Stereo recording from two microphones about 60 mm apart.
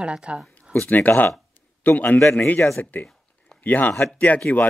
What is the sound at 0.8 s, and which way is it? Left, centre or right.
A man's voice, left.